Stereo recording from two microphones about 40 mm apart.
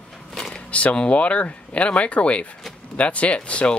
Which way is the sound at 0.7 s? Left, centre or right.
Left.